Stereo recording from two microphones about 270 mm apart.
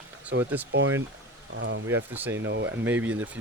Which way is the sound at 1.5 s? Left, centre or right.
Right.